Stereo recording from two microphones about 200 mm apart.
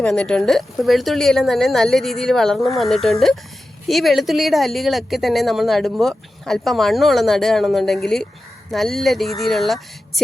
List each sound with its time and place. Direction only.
0.0 s speech: 5° left (ahead or behind)